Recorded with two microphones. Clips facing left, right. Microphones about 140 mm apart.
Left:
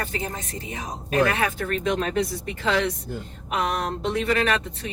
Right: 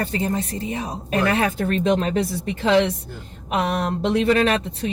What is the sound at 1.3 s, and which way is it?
Speech, 30° right (ahead or behind).